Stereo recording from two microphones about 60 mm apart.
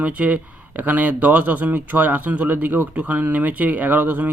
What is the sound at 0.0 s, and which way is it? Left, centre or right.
Speech, right.